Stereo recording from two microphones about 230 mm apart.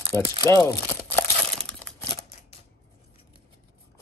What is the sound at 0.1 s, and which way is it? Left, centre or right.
Speech, centre.